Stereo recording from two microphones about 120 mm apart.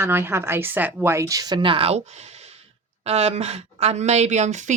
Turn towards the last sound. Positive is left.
turn(degrees=-75)  # may be behind; listen again after turning